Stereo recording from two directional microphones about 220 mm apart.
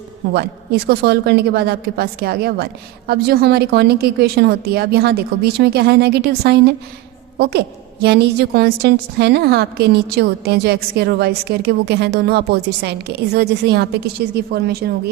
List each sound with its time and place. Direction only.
0.3 s a woman's voice: 45° right (ahead or behind)